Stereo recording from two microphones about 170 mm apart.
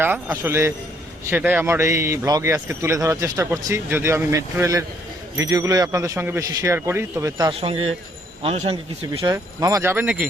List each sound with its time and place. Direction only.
0.0 s a man's voice: 15° right (ahead or behind)
7.6 s speech: 35° right (ahead or behind)
9.3 s a man's voice: 20° right (ahead or behind)